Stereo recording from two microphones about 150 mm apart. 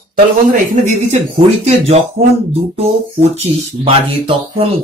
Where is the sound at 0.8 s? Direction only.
45° right (ahead or behind).